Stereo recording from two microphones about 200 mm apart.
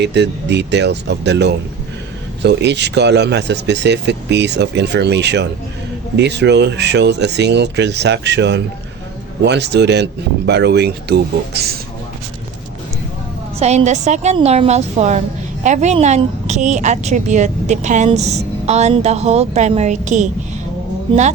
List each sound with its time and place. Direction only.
0.0 s speech: 60° right (ahead or behind)
13.6 s a woman's voice: 35° right (ahead or behind)